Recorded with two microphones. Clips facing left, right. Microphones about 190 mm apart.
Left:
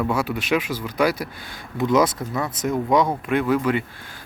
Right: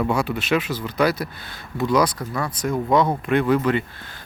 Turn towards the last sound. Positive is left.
turn(degrees=5)  # may be behind; listen again after turning